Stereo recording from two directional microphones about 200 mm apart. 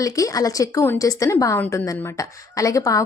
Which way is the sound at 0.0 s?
15° left (ahead or behind).